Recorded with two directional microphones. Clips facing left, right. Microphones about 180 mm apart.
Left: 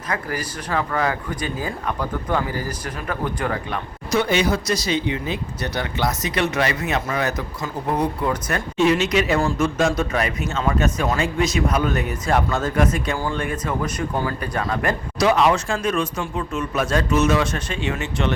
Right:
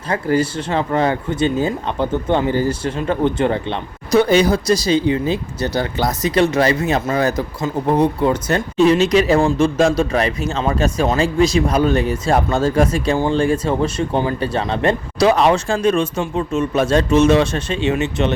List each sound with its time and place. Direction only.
0.1 s speech: 25° right (ahead or behind)